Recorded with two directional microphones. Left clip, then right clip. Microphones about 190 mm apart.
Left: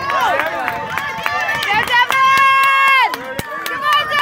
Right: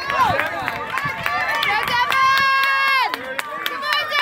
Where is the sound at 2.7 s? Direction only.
25° left (ahead or behind).